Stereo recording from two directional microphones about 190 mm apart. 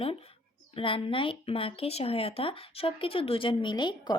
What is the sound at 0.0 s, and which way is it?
Speech, 30° left (ahead or behind).